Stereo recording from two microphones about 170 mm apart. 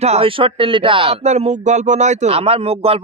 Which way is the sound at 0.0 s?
35° right (ahead or behind).